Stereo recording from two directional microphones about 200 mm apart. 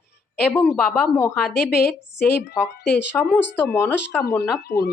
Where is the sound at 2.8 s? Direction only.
55° left (ahead or behind).